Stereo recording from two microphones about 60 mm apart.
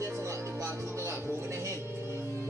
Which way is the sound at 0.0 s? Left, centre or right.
Right.